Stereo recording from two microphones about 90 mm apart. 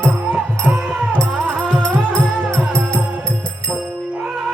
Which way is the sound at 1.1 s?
10° left (ahead or behind).